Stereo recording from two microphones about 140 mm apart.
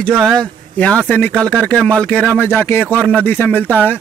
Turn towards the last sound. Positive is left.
turn(degrees=10)  # may be behind; listen again after turning